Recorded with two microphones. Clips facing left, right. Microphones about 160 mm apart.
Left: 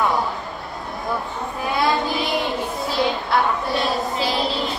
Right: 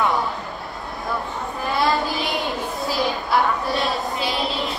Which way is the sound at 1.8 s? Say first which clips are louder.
Left 1 dB; centre (ahead or behind).